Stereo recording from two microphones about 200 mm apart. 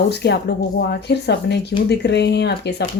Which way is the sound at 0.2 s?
55° left (ahead or behind).